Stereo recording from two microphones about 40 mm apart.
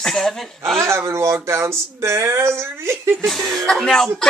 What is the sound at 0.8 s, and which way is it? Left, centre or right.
Speech, right.